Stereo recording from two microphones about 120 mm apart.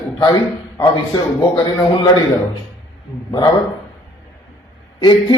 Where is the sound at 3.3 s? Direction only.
35° left (ahead or behind).